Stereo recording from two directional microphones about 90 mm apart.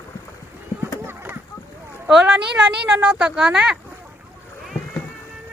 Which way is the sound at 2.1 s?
10° right (ahead or behind).